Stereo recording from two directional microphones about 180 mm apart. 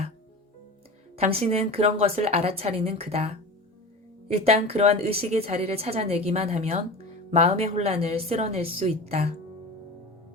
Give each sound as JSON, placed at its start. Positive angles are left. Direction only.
{"t": 1.1, "sound": "a woman's voice", "side_deg": -35}
{"t": 4.4, "sound": "a woman's voice", "side_deg": -35}